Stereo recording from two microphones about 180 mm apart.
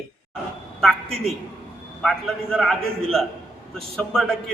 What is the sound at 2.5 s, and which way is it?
Speech, centre (ahead or behind).